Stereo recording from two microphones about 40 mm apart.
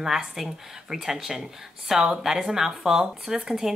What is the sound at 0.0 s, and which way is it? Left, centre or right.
Speech, centre.